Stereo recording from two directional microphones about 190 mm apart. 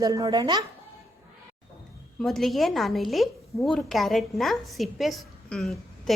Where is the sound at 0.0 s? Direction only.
20° right (ahead or behind).